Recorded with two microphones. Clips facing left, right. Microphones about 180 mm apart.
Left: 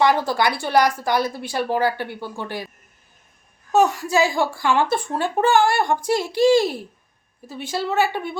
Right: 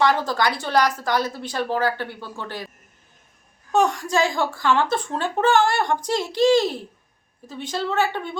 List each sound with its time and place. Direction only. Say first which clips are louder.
0.0 s a woman's voice: left 2 dB; 15° left (ahead or behind)
3.7 s a woman's voice: left 2 dB; 5° left (ahead or behind)